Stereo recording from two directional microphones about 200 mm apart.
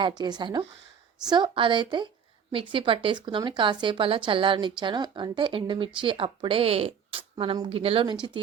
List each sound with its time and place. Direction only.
0.0 s speech: 20° right (ahead or behind)